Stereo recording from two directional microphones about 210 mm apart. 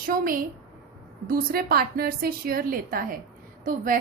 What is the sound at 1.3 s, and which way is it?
A woman's voice, 45° right (ahead or behind).